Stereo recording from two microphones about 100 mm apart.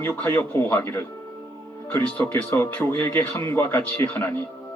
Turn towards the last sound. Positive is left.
turn(degrees=20)  # may be behind; listen again after turning